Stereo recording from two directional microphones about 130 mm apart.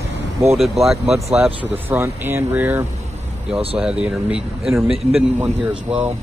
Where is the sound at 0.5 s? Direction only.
Centre (ahead or behind).